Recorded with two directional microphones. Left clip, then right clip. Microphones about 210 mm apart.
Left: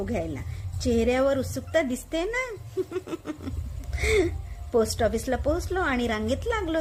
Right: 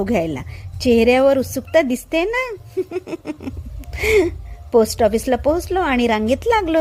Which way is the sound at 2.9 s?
25° right (ahead or behind).